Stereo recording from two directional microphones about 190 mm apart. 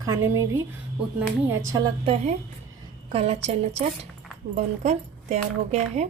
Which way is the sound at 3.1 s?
30° right (ahead or behind).